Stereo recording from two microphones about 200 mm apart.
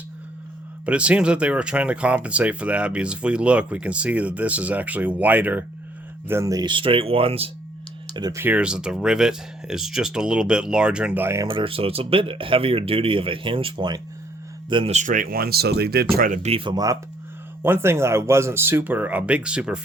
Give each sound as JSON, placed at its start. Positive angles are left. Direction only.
{"t": 0.9, "sound": "speech", "side_deg": -5}
{"t": 8.1, "sound": "speech", "side_deg": -20}
{"t": 11.4, "sound": "speech", "side_deg": -25}